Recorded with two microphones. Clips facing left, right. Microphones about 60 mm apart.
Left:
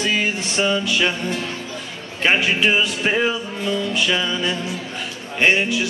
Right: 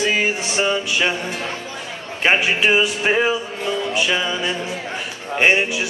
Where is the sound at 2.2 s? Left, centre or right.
Centre.